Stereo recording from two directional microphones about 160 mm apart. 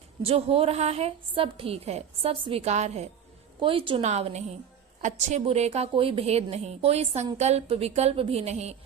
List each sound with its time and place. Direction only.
0.2 s a woman's voice: 35° right (ahead or behind)
3.6 s a woman's voice: 35° right (ahead or behind)